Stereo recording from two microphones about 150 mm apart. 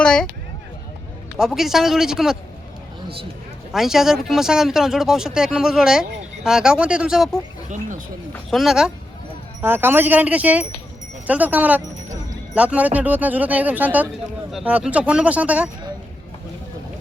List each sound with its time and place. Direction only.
0.0 s speech: 5° left (ahead or behind)
1.4 s speech: centre (ahead or behind)
3.7 s speech: 5° right (ahead or behind)
7.7 s speech: 60° right (ahead or behind)
8.4 s speech: centre (ahead or behind)
9.6 s speech: 15° right (ahead or behind)